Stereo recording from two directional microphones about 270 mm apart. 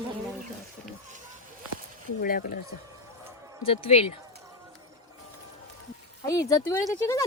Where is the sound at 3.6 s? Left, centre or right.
Left.